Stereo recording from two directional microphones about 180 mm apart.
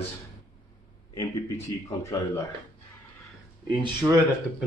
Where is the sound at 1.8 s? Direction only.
15° left (ahead or behind).